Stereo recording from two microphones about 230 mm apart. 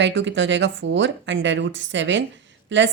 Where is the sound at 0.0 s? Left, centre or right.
Right.